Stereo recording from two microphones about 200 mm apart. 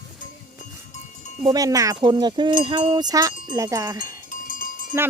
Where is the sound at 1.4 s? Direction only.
20° right (ahead or behind).